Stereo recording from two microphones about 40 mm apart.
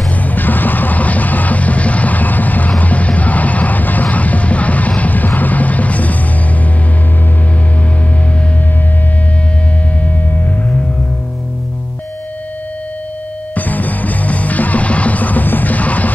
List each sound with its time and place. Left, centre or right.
0.1 s music: left
13.6 s music: left